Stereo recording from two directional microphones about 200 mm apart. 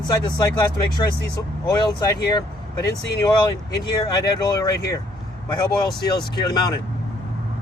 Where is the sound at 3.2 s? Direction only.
20° left (ahead or behind).